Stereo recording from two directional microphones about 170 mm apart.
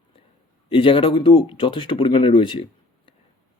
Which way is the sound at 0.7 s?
30° left (ahead or behind).